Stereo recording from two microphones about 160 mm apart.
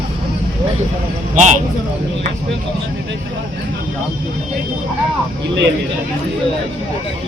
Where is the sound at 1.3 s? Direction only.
50° right (ahead or behind).